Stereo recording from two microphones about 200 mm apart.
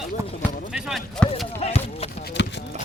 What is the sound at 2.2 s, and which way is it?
Clip-clop, 60° left (ahead or behind).